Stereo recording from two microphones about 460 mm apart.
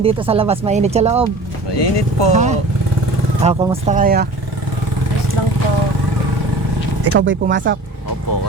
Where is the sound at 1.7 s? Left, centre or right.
Left.